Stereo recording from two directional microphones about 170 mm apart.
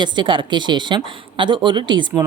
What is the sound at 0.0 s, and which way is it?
A woman's voice, 30° right (ahead or behind).